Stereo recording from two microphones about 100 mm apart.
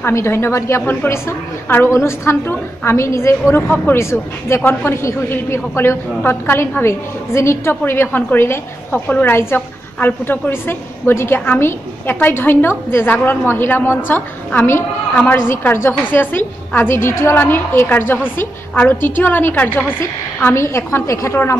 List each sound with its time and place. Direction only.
0.0 s a woman's voice: 25° left (ahead or behind)